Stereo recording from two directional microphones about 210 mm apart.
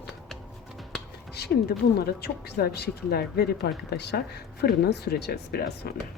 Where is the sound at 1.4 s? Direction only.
50° left (ahead or behind).